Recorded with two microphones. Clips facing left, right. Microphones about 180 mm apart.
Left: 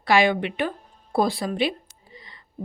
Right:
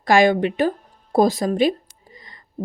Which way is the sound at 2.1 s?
45° right (ahead or behind).